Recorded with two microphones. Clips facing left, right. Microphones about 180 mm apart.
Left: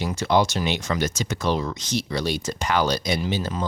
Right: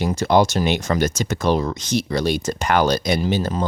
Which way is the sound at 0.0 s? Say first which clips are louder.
Right 4 dB; 45° right (ahead or behind).